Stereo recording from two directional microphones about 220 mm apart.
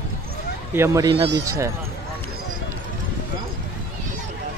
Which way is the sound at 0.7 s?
15° right (ahead or behind).